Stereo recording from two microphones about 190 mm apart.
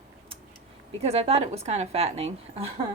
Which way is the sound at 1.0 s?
35° right (ahead or behind).